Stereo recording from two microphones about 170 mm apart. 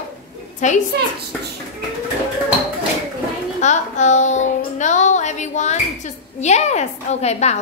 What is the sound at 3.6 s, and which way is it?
Child singing, 45° left (ahead or behind).